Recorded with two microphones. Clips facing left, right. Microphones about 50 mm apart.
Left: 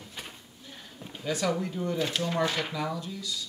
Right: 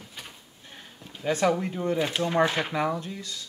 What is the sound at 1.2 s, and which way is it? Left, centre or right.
Speech, right.